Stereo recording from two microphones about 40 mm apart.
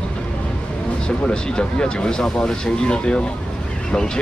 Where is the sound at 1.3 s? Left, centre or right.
Left.